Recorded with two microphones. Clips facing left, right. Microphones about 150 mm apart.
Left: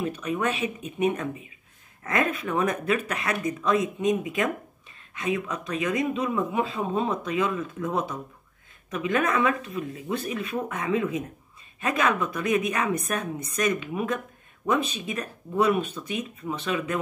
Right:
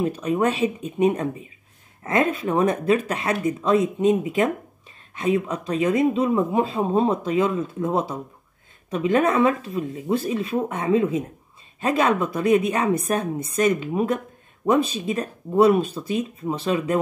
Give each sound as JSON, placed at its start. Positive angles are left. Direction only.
{"t": 0.0, "sound": "speech", "side_deg": -35}